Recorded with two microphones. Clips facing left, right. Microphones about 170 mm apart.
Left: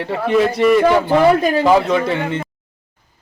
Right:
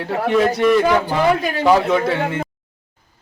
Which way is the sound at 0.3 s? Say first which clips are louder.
Left 2 dB; centre (ahead or behind).